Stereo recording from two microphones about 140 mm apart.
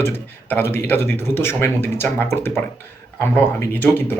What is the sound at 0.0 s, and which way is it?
Speech, 15° left (ahead or behind).